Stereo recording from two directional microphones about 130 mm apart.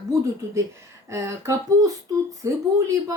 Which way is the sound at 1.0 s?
20° right (ahead or behind).